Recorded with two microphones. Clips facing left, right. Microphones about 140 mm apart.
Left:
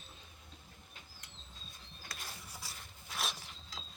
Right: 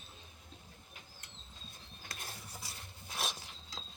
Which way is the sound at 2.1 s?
45° right (ahead or behind).